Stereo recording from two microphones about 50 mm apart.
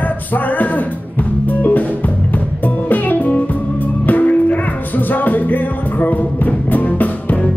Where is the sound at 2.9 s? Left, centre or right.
Left.